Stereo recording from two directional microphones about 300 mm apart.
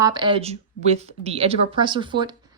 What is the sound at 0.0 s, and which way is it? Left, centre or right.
Speech, centre.